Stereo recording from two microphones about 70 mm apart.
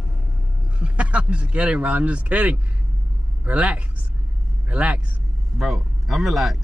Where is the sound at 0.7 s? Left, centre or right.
Centre.